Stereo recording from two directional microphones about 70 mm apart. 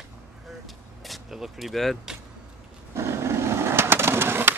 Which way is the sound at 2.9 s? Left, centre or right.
Right.